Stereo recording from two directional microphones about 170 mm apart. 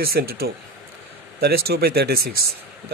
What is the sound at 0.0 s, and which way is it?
A man's voice, 65° right (ahead or behind).